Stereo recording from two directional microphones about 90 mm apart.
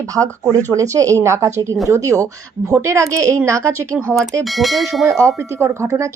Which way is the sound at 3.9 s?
15° right (ahead or behind).